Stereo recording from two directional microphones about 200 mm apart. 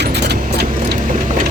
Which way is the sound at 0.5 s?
55° right (ahead or behind).